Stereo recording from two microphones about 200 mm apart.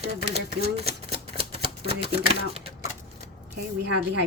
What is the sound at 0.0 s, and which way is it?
Speech, 30° right (ahead or behind).